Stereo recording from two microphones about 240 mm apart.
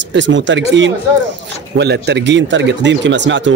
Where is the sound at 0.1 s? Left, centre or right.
Right.